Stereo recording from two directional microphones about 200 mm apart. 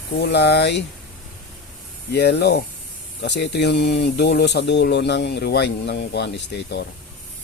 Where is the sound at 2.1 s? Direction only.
55° left (ahead or behind).